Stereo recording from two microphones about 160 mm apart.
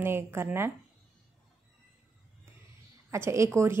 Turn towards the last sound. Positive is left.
turn(degrees=-15)  # may be behind; listen again after turning